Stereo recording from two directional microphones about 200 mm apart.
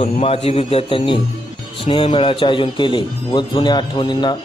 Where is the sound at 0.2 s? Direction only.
30° left (ahead or behind).